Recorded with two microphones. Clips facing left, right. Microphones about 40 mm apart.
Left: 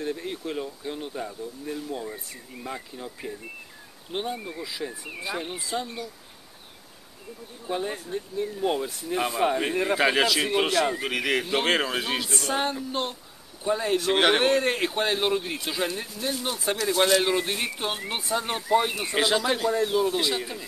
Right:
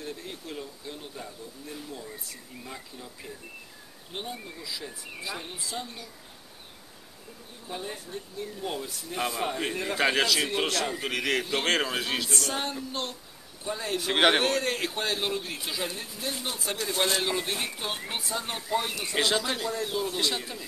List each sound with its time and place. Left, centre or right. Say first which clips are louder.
0.0 s speech: left 8 dB; left
7.6 s a man's voice: left 7 dB; left
13.9 s a man's voice: even; centre
14.4 s speech: left 5 dB; left
15.5 s a man's voice: left 5 dB; centre; by 16.7 s left
16.9 s speech: left 6 dB; left
17.2 s speech: left 4 dB; centre
19.1 s a man's voice: left 3 dB; centre